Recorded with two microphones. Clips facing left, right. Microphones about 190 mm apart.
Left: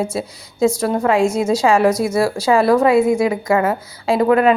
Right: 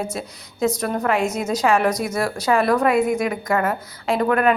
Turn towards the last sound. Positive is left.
turn(degrees=25)  # may be behind; listen again after turning